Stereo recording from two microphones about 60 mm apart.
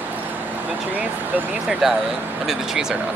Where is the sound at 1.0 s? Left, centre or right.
Right.